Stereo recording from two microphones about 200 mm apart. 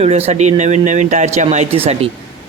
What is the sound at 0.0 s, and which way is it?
Speech, 30° right (ahead or behind).